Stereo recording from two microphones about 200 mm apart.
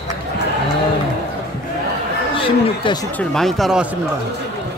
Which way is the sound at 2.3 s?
25° left (ahead or behind).